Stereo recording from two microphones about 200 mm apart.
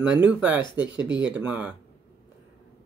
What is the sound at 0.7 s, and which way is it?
Speech, 65° right (ahead or behind).